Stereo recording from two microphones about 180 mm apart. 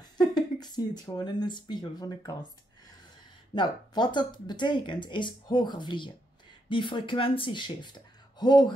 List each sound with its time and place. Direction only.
0.0 s speech: 20° left (ahead or behind)
3.5 s speech: 25° left (ahead or behind)